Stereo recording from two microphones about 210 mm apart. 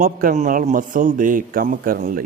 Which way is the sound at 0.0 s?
40° right (ahead or behind).